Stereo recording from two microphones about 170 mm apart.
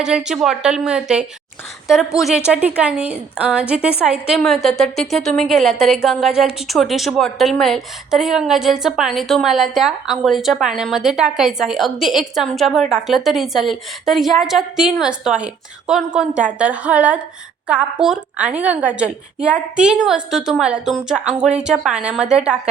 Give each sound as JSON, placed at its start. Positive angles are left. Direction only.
{"t": 0.0, "sound": "a woman's voice", "side_deg": -5}